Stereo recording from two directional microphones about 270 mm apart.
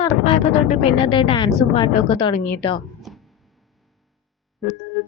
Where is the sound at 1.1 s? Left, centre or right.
Centre.